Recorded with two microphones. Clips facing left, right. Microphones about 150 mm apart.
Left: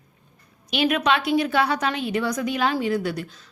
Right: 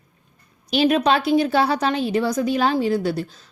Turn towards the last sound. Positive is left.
turn(degrees=-30)  # may be behind; listen again after turning